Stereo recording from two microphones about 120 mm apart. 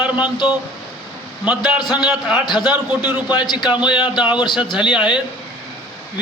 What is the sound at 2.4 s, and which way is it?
A man's voice, 35° left (ahead or behind).